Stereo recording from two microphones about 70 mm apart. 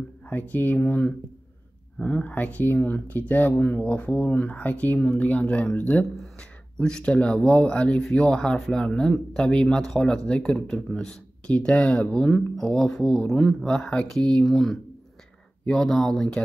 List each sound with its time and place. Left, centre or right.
0.3 s speech: left; by 16.3 s centre